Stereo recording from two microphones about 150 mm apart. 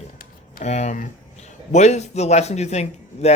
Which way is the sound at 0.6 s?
50° left (ahead or behind).